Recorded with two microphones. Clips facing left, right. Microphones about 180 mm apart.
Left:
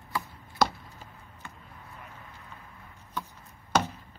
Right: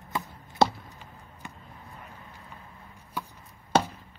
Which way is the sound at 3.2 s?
10° right (ahead or behind).